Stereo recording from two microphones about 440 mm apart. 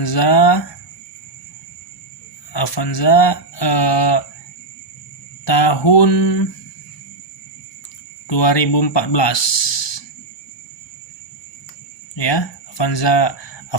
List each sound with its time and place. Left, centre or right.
0.0 s speech: left
2.5 s speech: left
5.5 s speech: left
8.3 s speech: left
12.1 s speech: left